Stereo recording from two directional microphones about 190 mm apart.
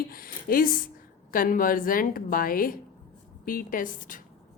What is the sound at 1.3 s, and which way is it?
A woman's voice, 45° left (ahead or behind).